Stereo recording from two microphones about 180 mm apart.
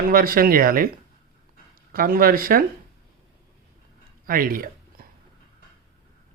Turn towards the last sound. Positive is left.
turn(degrees=-55)  # may be behind; listen again after turning